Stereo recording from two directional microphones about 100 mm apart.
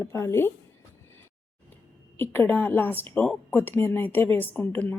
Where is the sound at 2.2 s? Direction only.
20° left (ahead or behind).